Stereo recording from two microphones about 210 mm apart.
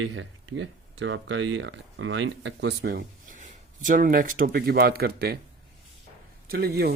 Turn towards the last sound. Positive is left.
turn(degrees=-45)  # may be behind; listen again after turning